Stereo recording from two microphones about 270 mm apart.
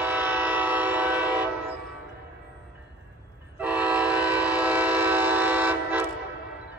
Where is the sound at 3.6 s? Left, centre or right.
Centre.